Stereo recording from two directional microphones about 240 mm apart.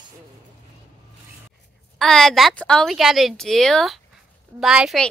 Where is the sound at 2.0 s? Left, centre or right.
Centre.